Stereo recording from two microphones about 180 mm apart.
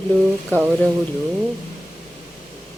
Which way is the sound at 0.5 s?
10° left (ahead or behind).